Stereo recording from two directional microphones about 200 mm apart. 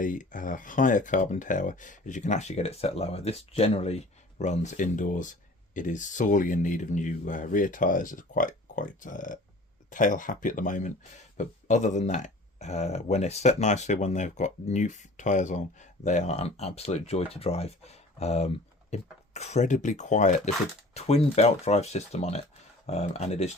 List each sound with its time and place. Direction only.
0.0 s speech: 40° left (ahead or behind)